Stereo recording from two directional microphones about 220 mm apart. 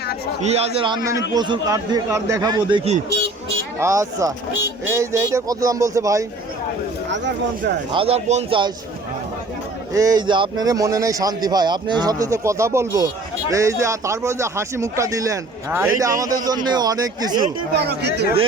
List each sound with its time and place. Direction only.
0.4 s speech: 30° right (ahead or behind)
3.8 s speech: 15° right (ahead or behind)
7.1 s speech: 55° right (ahead or behind)
7.9 s speech: 25° right (ahead or behind)
9.9 s speech: 15° right (ahead or behind)
17.7 s speech: 50° right (ahead or behind)